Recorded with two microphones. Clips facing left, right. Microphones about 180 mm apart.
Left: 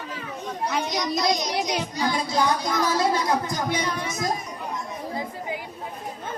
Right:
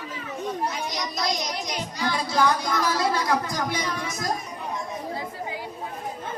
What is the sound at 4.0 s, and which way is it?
Speech, centre (ahead or behind).